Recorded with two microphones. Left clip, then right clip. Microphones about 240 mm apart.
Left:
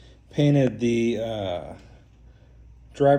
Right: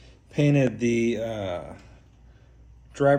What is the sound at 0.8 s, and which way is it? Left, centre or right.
Speech, centre.